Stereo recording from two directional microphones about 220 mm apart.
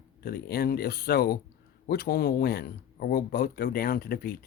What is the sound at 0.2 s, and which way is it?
Speech, 45° left (ahead or behind).